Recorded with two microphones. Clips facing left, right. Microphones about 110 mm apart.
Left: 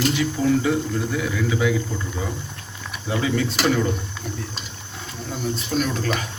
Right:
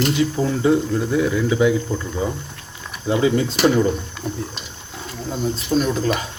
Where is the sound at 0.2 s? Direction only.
30° right (ahead or behind).